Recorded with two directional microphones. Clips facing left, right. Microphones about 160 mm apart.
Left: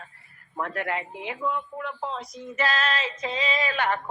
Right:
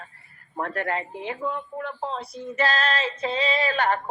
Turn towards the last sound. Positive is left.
turn(degrees=-35)  # may be behind; listen again after turning